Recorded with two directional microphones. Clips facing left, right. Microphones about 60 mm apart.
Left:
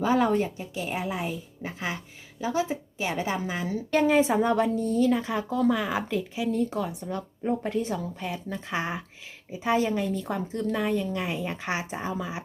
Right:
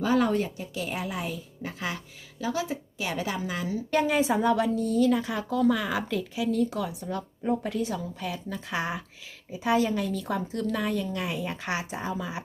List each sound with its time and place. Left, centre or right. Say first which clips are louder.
0.0 s a woman's voice: left 1 dB; left
3.7 s a woman's voice: left 3 dB; left